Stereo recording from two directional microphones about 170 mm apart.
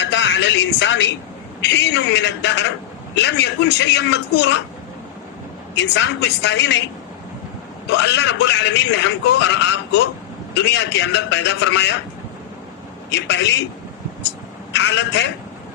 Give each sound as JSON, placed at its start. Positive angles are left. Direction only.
{"t": 0.0, "sound": "a sound", "side_deg": 90}
{"t": 1.6, "sound": "a man's voice", "side_deg": 90}
{"t": 5.7, "sound": "a man's voice", "side_deg": 90}
{"t": 7.9, "sound": "a man's voice", "side_deg": 90}
{"t": 13.1, "sound": "a man's voice", "side_deg": 90}
{"t": 14.7, "sound": "a man's voice", "side_deg": 90}